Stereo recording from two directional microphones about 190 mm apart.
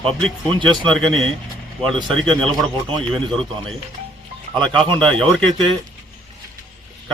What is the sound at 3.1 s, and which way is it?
Speech, centre (ahead or behind).